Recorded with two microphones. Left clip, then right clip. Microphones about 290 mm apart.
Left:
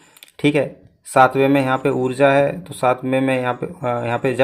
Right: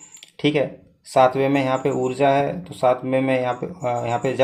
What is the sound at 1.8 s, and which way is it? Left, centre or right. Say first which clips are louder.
Speech: left 3 dB; left.